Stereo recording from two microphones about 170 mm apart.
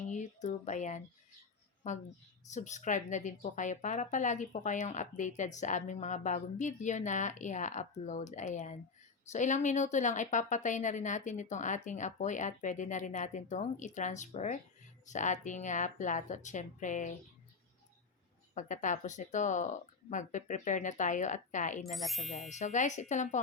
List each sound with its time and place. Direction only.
0.1 s speech: 45° left (ahead or behind)
18.5 s speech: 50° left (ahead or behind)
21.8 s speech: centre (ahead or behind)
22.4 s speech: 45° left (ahead or behind)